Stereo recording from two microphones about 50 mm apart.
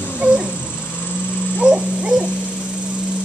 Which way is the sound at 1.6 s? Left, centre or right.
Right.